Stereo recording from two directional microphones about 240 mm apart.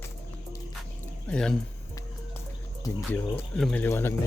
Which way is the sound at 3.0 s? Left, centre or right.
Centre.